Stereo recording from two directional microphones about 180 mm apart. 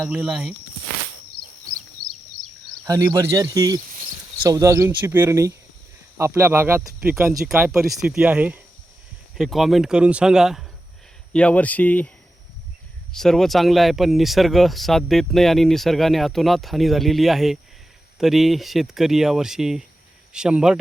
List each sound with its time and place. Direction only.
0.0 s speech: 5° right (ahead or behind)
1.4 s bird: 55° right (ahead or behind)
2.0 s a sound: 55° right (ahead or behind)
2.8 s speech: 20° right (ahead or behind); by 12.1 s 10° left (ahead or behind)
13.1 s speech: centre (ahead or behind)